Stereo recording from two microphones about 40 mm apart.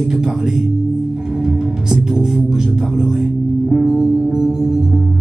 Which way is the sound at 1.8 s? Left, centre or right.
Centre.